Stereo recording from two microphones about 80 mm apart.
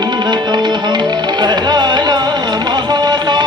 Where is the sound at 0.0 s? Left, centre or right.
Right.